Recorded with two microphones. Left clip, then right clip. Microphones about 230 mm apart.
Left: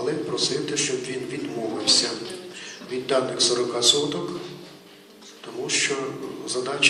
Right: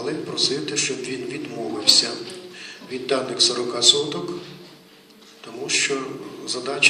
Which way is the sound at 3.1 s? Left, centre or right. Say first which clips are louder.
Right 1 dB; right.